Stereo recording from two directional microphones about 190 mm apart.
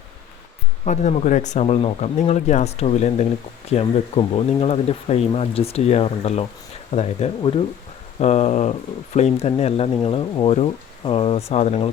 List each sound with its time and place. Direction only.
0.9 s speech: 40° left (ahead or behind)